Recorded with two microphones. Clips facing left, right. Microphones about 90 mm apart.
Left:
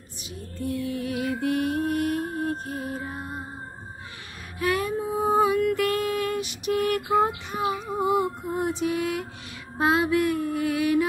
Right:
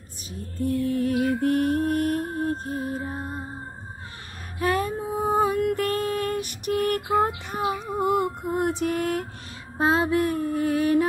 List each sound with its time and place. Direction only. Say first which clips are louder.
0.3 s music: right 4 dB; 40° right (ahead or behind)
4.6 s music: right 1 dB; 40° right (ahead or behind)
7.2 s child singing: even; 45° right (ahead or behind)
9.8 s music: even; 30° right (ahead or behind)